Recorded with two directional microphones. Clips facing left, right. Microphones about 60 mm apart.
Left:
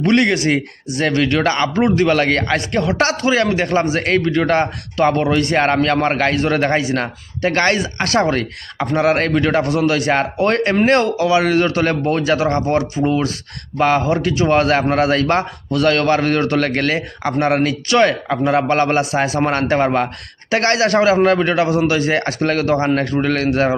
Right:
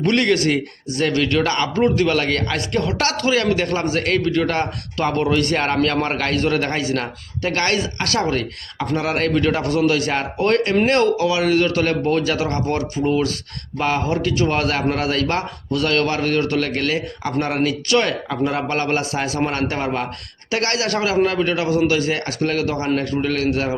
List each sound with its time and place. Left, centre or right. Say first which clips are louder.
0.1 s a man's voice: left 2 dB; left
12.8 s speech: left 2 dB; centre
13.7 s a man's voice: left 6 dB; left
14.0 s a man's voice: left 3 dB; left